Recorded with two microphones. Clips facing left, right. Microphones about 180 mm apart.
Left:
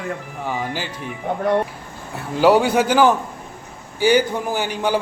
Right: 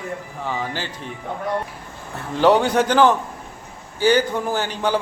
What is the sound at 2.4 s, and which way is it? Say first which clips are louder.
A man's voice: left 1 dB; 5° left (ahead or behind).